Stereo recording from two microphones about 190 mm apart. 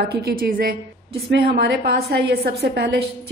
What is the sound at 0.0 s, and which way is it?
A woman's voice, 55° right (ahead or behind).